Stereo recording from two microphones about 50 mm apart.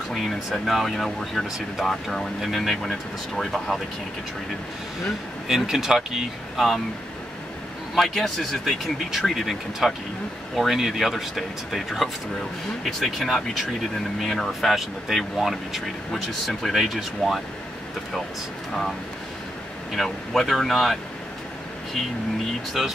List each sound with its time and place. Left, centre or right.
0.1 s speech: centre
5.5 s speech: centre
7.9 s speech: centre
20.0 s speech: centre
22.8 s speech: centre